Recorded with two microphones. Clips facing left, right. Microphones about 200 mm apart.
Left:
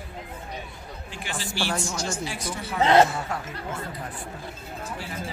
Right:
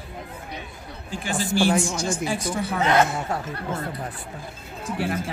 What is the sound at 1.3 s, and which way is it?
Speech, 50° right (ahead or behind).